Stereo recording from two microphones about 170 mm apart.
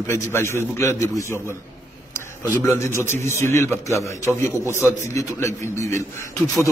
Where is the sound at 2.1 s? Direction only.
15° left (ahead or behind).